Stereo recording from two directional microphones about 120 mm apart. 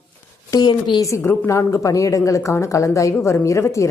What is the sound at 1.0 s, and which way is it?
Speech, 20° left (ahead or behind).